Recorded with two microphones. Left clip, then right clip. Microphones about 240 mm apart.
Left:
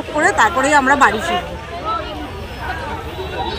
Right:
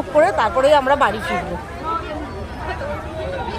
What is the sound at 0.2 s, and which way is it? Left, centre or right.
Speech, right.